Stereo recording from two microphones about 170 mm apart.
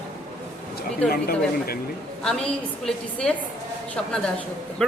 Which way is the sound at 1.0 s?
10° left (ahead or behind).